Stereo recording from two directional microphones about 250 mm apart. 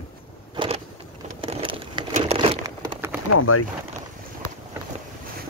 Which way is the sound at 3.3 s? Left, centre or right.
Left.